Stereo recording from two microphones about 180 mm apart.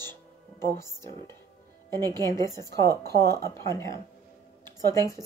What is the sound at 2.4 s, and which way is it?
Speech, 20° right (ahead or behind).